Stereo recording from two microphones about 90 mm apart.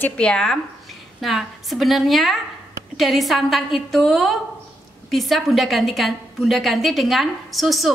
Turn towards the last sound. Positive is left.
turn(degrees=0)  # may be behind; listen again after turning